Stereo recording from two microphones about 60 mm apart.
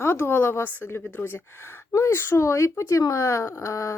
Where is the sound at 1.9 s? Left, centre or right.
Left.